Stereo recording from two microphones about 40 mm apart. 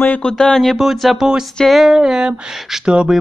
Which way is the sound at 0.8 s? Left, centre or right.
Centre.